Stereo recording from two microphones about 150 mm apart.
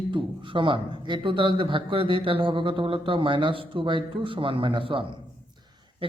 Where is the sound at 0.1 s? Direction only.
35° right (ahead or behind).